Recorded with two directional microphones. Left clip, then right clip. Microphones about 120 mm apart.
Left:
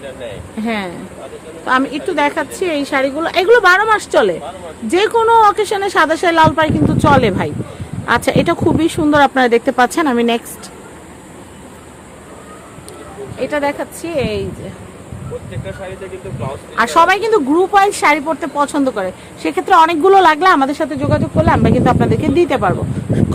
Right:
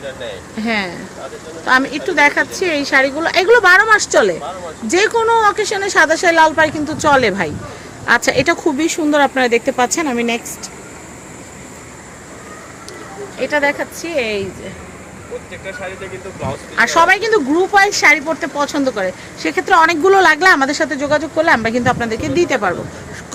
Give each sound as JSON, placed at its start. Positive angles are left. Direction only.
{"t": 0.6, "sound": "a woman's voice", "side_deg": 25}
{"t": 7.1, "sound": "speech", "side_deg": 25}
{"t": 9.9, "sound": "speech", "side_deg": 45}
{"t": 13.4, "sound": "speech", "side_deg": 15}
{"t": 16.4, "sound": "speech", "side_deg": 10}
{"t": 16.8, "sound": "speech", "side_deg": 20}
{"t": 21.6, "sound": "a woman's voice", "side_deg": 20}